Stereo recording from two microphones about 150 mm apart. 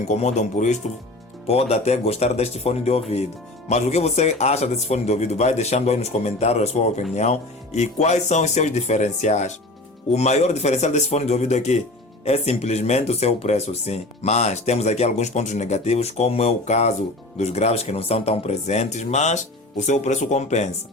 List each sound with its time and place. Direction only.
0.1 s speech: 50° left (ahead or behind)